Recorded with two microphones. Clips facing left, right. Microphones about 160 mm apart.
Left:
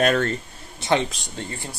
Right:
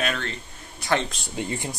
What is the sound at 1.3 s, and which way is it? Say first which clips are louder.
Speech: right 4 dB; 15° right (ahead or behind).